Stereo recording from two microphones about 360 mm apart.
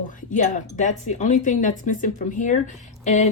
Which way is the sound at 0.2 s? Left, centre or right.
Left.